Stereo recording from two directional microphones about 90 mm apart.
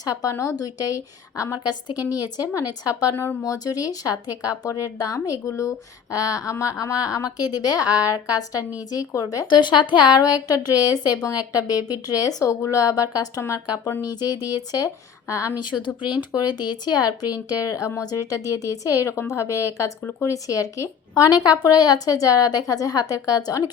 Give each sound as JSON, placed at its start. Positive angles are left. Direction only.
{"t": 0.0, "sound": "a woman's voice", "side_deg": 40}
{"t": 3.4, "sound": "a woman's voice", "side_deg": 40}
{"t": 9.5, "sound": "a woman's voice", "side_deg": 60}
{"t": 15.5, "sound": "a woman's voice", "side_deg": 60}
{"t": 20.0, "sound": "speech", "side_deg": 15}
{"t": 20.2, "sound": "a woman's voice", "side_deg": 35}